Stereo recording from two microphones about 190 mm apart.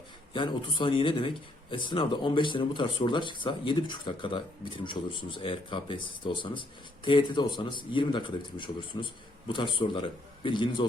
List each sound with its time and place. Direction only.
0.3 s speech: 25° left (ahead or behind)